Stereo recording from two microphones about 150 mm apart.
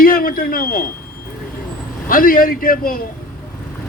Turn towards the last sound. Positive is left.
turn(degrees=75)  # may be behind; listen again after turning